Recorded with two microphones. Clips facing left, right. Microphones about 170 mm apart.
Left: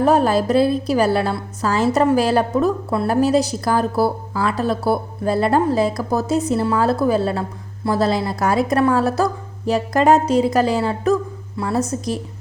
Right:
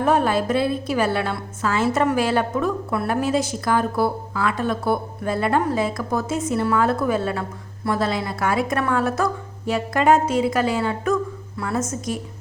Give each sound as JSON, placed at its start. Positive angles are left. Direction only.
{"t": 0.0, "sound": "a woman's voice", "side_deg": 35}